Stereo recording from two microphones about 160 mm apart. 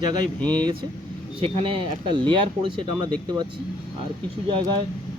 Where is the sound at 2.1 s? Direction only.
30° right (ahead or behind).